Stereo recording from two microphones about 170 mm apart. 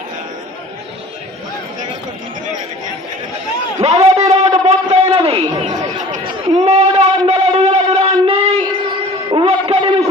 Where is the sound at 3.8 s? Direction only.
40° right (ahead or behind).